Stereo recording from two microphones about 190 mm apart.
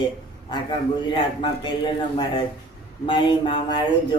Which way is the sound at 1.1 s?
25° left (ahead or behind).